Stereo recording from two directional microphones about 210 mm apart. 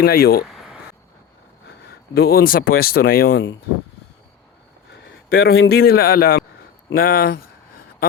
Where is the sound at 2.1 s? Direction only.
45° left (ahead or behind).